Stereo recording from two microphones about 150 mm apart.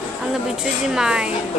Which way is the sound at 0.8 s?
5° right (ahead or behind).